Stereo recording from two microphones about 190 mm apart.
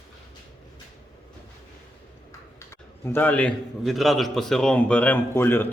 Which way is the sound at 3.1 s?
10° left (ahead or behind).